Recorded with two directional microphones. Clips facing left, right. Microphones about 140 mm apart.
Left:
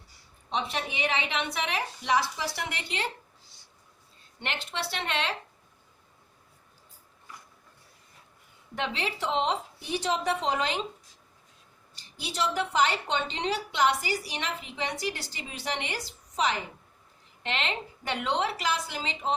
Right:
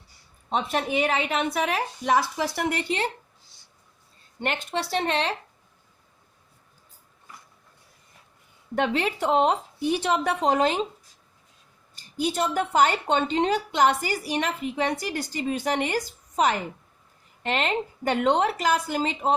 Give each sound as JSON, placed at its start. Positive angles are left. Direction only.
{"t": 0.5, "sound": "a woman's voice", "side_deg": -50}
{"t": 4.4, "sound": "a woman's voice", "side_deg": -45}
{"t": 8.7, "sound": "a woman's voice", "side_deg": -50}
{"t": 11.9, "sound": "a woman's voice", "side_deg": -45}